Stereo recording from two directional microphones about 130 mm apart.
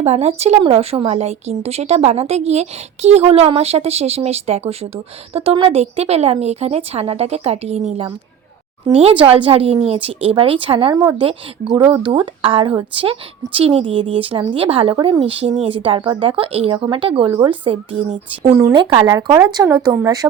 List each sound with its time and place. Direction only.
0.0 s speech: 55° right (ahead or behind)
9.0 s speech: 50° right (ahead or behind)
10.9 s a woman's voice: 30° right (ahead or behind)
11.9 s speech: 40° right (ahead or behind)
18.4 s a woman's voice: 25° right (ahead or behind)
18.7 s speech: 35° right (ahead or behind)